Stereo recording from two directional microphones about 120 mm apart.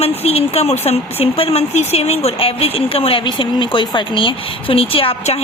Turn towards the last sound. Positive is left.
turn(degrees=55)  # may be behind; listen again after turning